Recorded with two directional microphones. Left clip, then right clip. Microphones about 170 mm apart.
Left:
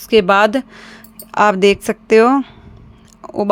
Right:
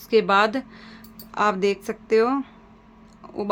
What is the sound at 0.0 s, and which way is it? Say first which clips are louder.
Speech: left 7 dB; 45° left (ahead or behind).